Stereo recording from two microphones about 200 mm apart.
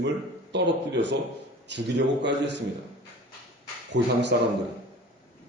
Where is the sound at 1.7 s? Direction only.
60° right (ahead or behind).